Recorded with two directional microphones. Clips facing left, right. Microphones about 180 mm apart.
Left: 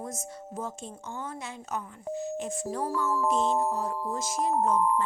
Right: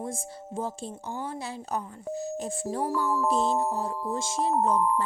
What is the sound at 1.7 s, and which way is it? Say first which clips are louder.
Speech: right 1 dB; 35° right (ahead or behind).